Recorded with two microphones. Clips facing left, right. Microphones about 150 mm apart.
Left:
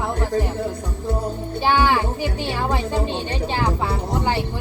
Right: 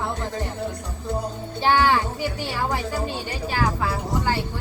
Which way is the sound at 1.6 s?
15° left (ahead or behind).